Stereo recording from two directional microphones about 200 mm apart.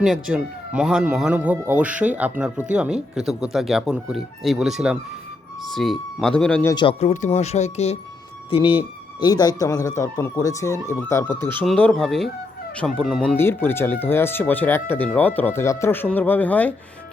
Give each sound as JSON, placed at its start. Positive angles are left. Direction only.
{"t": 0.0, "sound": "speech", "side_deg": -5}
{"t": 6.7, "sound": "speech", "side_deg": 30}